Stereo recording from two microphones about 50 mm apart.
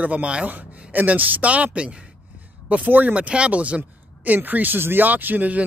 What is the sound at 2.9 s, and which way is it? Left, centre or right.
Speech, right.